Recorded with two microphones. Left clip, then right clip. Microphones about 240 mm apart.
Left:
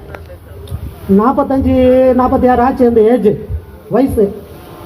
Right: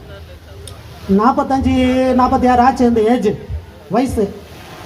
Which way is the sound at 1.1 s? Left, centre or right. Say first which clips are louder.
Left 2 dB; right.